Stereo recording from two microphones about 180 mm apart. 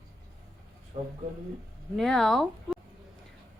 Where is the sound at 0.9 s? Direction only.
40° right (ahead or behind).